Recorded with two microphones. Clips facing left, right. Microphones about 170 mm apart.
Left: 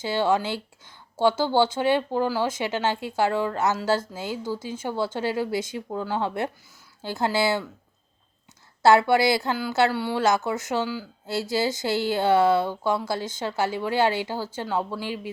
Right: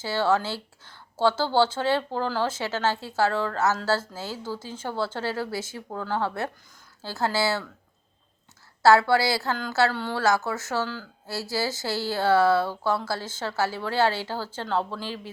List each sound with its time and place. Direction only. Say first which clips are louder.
0.0 s a woman's voice: left 1 dB; 15° left (ahead or behind)
8.8 s a woman's voice: left 1 dB; 20° left (ahead or behind)